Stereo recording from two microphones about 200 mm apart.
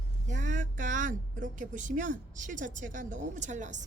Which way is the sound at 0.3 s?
40° right (ahead or behind).